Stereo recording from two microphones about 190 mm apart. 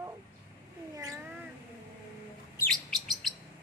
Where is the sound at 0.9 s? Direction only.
15° right (ahead or behind).